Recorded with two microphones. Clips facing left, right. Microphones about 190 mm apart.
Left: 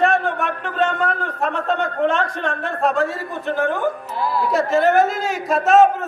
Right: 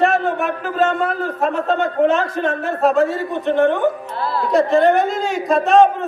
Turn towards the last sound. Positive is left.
turn(degrees=0)  # may be behind; listen again after turning